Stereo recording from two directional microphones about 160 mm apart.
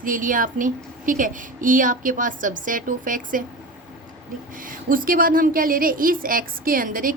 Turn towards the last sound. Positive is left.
turn(degrees=-60)  # may be behind; listen again after turning